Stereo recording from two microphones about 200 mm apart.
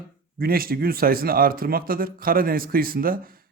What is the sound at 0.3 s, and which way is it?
Speech, 50° right (ahead or behind).